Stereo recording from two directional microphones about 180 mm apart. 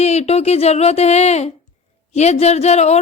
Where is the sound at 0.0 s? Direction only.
35° left (ahead or behind).